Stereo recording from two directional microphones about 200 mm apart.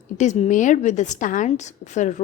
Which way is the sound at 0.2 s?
35° left (ahead or behind).